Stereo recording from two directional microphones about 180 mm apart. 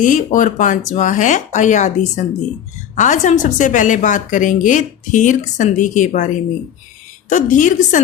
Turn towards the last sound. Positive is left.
turn(degrees=45)  # may be behind; listen again after turning